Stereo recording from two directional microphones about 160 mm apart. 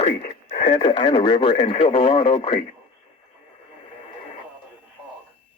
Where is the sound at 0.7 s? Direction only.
30° left (ahead or behind).